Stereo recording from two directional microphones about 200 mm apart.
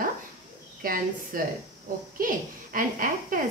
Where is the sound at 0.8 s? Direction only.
45° right (ahead or behind).